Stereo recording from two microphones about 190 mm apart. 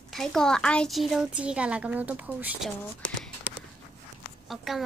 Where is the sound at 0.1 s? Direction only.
Centre (ahead or behind).